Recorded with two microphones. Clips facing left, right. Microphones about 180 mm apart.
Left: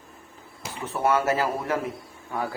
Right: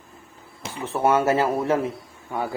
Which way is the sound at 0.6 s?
25° right (ahead or behind).